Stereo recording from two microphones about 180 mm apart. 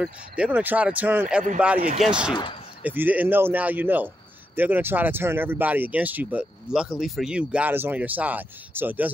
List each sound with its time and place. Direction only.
0.0 s speech: 5° right (ahead or behind)
1.8 s speech: 40° right (ahead or behind)
2.0 s speech: 5° right (ahead or behind)